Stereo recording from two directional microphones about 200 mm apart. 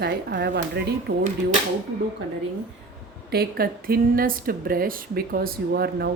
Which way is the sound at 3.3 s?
50° right (ahead or behind).